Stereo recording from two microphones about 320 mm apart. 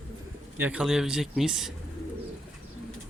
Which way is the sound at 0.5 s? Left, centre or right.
Centre.